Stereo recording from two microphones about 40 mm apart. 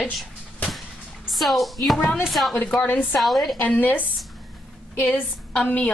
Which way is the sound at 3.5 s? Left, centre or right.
Left.